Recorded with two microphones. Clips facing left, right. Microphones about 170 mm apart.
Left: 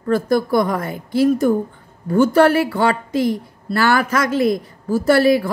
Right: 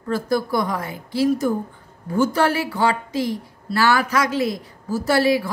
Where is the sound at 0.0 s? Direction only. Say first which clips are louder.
Left 5 dB; 55° left (ahead or behind).